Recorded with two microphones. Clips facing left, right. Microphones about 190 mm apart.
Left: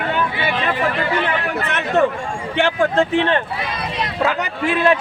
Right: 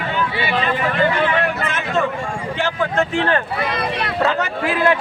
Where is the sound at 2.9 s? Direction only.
20° left (ahead or behind).